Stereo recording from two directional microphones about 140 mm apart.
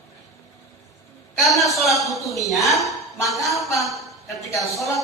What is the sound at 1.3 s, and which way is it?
A man's voice, centre (ahead or behind).